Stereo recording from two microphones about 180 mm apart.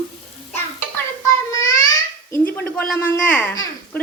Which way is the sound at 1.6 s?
15° left (ahead or behind).